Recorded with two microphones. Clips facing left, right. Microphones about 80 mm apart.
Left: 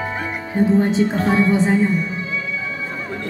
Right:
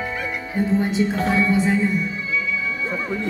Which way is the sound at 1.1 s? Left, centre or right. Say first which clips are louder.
Left 2 dB; left.